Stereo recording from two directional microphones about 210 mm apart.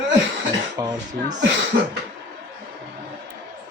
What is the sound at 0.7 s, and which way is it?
Speech, 20° right (ahead or behind).